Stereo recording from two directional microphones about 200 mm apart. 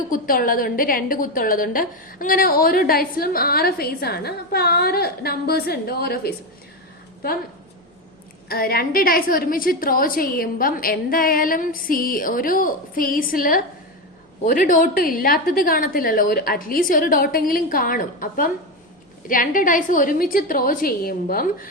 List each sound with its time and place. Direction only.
0.1 s a woman's voice: 45° left (ahead or behind)
8.4 s a woman's voice: 45° left (ahead or behind)